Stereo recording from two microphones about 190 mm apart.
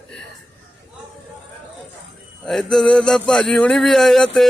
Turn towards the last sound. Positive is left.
turn(degrees=0)  # may be behind; listen again after turning